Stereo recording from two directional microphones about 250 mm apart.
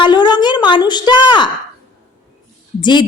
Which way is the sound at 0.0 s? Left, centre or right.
Centre.